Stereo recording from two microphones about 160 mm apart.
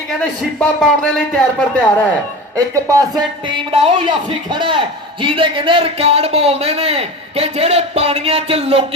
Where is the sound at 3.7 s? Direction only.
35° right (ahead or behind).